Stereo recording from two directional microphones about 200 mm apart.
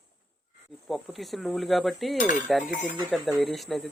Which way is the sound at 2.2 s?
40° left (ahead or behind).